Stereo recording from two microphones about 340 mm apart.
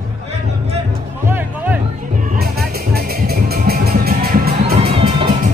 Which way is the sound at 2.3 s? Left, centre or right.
Right.